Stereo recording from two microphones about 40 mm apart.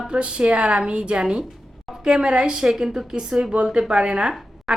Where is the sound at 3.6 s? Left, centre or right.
Right.